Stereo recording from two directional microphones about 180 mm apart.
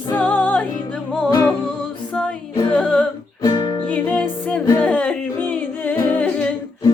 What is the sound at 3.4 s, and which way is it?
Music, 20° left (ahead or behind).